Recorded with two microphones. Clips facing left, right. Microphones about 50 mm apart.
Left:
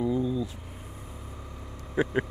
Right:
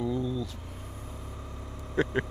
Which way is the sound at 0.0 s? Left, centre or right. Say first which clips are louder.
Left 3 dB; centre.